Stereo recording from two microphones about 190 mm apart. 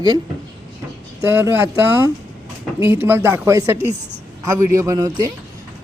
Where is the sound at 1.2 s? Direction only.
10° right (ahead or behind).